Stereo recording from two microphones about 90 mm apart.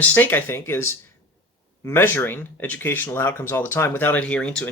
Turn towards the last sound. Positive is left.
turn(degrees=10)  # may be behind; listen again after turning